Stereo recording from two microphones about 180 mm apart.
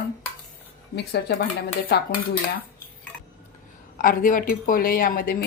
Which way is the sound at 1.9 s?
65° left (ahead or behind).